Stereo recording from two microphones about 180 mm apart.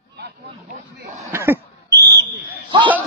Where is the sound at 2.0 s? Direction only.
70° right (ahead or behind).